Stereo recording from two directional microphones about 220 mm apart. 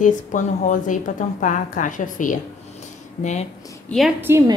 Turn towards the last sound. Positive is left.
turn(degrees=-15)  # may be behind; listen again after turning